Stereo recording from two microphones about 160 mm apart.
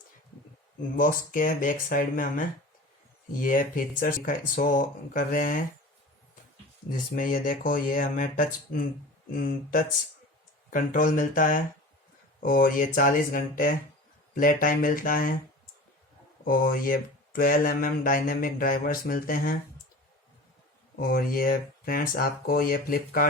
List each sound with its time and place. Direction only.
0.9 s speech: 55° left (ahead or behind)
6.9 s speech: 60° left (ahead or behind)
16.4 s speech: 65° left (ahead or behind)
21.0 s speech: 65° left (ahead or behind)